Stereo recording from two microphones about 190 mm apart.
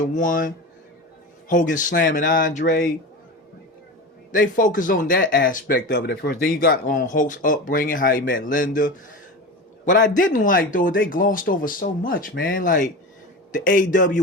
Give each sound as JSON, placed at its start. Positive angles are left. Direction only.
{"t": 0.0, "sound": "speech", "side_deg": 45}
{"t": 4.3, "sound": "speech", "side_deg": 45}
{"t": 9.8, "sound": "speech", "side_deg": 45}